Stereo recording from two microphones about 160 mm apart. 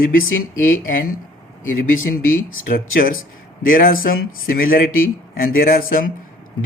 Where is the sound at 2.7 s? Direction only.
60° left (ahead or behind).